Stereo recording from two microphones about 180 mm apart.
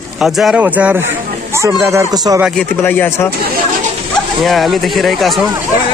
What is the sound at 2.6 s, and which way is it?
Speech, 10° left (ahead or behind).